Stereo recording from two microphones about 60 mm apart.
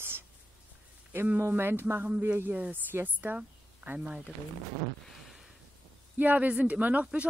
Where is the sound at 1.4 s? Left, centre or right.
Right.